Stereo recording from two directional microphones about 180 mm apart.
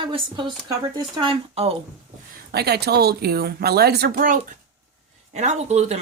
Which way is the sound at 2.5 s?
65° right (ahead or behind).